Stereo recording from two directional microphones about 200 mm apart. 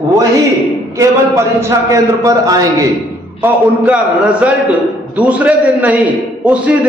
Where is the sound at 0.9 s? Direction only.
15° right (ahead or behind).